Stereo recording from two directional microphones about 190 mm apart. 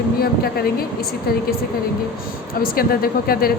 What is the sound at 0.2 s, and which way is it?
Speech, 55° left (ahead or behind).